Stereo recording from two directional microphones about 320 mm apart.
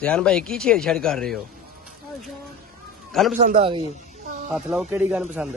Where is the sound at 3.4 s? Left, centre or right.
Centre.